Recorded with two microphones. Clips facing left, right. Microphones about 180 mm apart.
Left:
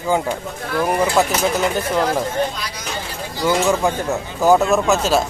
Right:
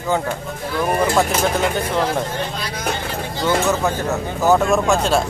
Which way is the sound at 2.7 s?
55° right (ahead or behind).